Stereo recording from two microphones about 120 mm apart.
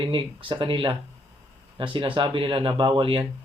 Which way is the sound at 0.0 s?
45° right (ahead or behind).